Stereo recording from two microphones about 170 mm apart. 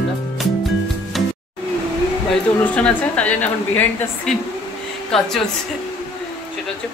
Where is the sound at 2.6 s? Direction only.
10° left (ahead or behind).